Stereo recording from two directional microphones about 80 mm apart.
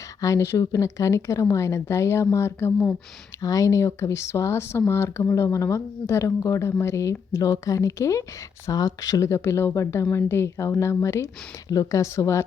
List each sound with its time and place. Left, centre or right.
0.2 s speech: left
3.4 s speech: left